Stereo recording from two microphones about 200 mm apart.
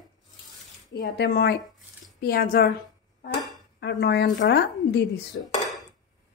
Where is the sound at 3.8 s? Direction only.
60° left (ahead or behind).